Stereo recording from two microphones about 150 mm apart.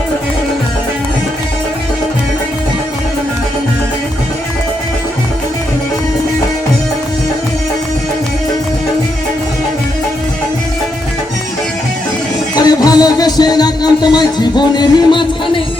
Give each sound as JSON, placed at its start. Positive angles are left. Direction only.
{"t": 12.5, "sound": "music", "side_deg": 25}